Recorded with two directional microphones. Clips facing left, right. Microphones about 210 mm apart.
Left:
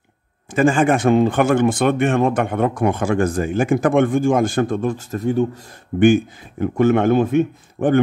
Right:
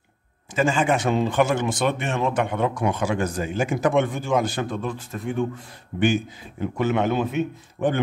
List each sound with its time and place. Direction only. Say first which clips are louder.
0.6 s speech: left 6 dB; 50° left (ahead or behind)
5.9 s speech: left 8 dB; 55° left (ahead or behind)